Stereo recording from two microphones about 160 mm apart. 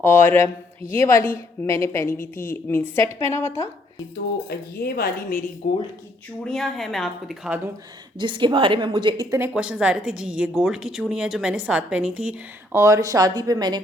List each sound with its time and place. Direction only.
0.0 s speech: 15° left (ahead or behind)
4.4 s speech: 75° left (ahead or behind)
5.6 s speech: 40° left (ahead or behind)
6.4 s a woman's voice: 5° left (ahead or behind)
8.2 s speech: 30° right (ahead or behind)
9.5 s a woman's voice: 5° right (ahead or behind)
12.8 s speech: 20° right (ahead or behind)